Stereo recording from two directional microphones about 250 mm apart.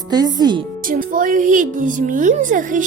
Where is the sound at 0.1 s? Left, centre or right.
Centre.